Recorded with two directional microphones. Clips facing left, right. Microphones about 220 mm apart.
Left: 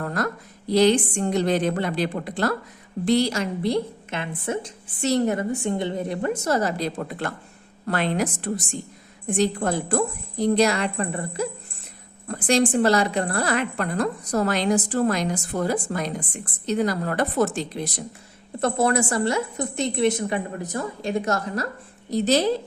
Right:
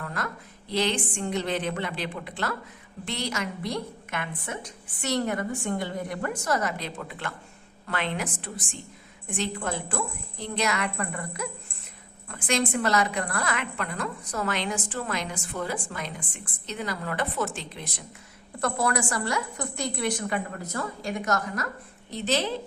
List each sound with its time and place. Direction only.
0.0 s a sound: 40° left (ahead or behind)
0.7 s a woman's voice: 40° left (ahead or behind)
18.6 s a woman's voice: 25° left (ahead or behind)